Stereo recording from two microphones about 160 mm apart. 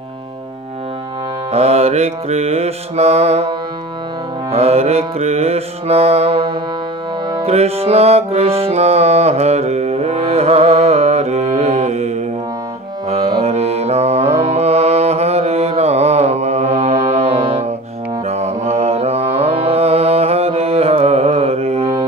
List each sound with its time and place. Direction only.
1.5 s music: 40° right (ahead or behind)
4.5 s music: 40° right (ahead or behind)
13.1 s mantra: 40° right (ahead or behind)
18.2 s music: 40° right (ahead or behind)